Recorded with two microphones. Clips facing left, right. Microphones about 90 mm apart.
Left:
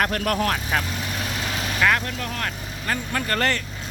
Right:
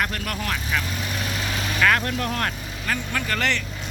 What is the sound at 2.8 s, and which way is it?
Speech, 35° left (ahead or behind).